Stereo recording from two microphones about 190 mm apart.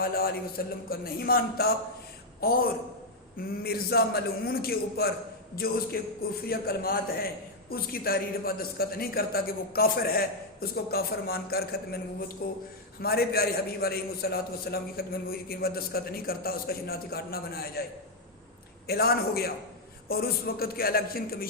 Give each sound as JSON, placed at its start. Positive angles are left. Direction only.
{"t": 0.0, "sound": "a man's voice", "side_deg": 50}
{"t": 18.9, "sound": "a man's voice", "side_deg": 55}